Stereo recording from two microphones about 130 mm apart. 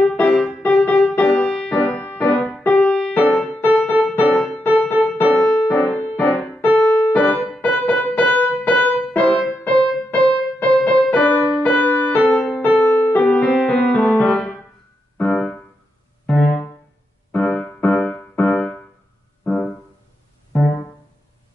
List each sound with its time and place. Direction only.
0.0 s music: 5° left (ahead or behind)
6.8 s keyboard: 10° left (ahead or behind)
9.7 s music: 10° left (ahead or behind)
15.1 s keyboard: 10° left (ahead or behind)
16.3 s piano: 10° left (ahead or behind)
17.3 s music: 10° left (ahead or behind)